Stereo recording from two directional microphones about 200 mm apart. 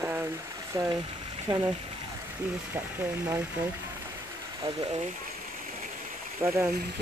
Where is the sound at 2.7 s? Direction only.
10° right (ahead or behind).